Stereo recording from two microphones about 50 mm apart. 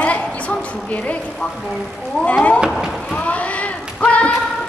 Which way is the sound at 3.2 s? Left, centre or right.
Left.